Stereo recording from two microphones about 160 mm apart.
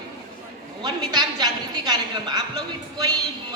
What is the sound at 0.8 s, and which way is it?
A woman's voice, 25° right (ahead or behind).